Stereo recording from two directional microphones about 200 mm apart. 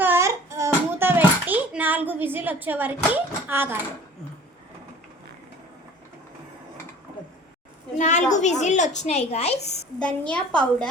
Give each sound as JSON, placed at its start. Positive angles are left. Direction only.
{"t": 0.0, "sound": "a sound", "side_deg": -10}
{"t": 7.9, "sound": "a woman's voice", "side_deg": 35}
{"t": 10.0, "sound": "a woman's voice", "side_deg": 5}